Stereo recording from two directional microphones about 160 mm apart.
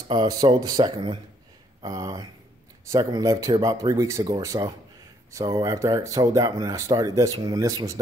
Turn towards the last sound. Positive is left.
turn(degrees=-20)  # may be behind; listen again after turning